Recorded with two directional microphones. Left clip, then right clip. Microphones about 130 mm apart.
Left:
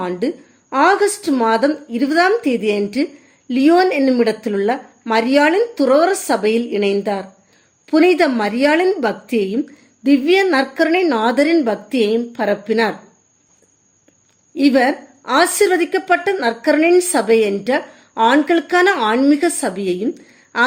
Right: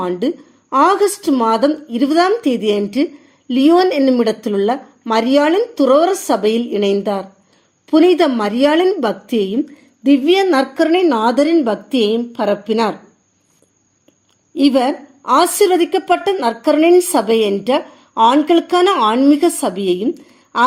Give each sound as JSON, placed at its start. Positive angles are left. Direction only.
{"t": 0.0, "sound": "a woman's voice", "side_deg": -10}
{"t": 14.5, "sound": "a woman's voice", "side_deg": -15}